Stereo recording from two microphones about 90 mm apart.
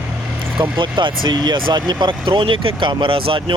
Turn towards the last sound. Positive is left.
turn(degrees=-80)